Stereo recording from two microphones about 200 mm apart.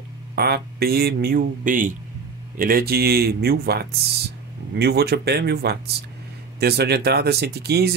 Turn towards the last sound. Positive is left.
turn(degrees=-55)  # may be behind; listen again after turning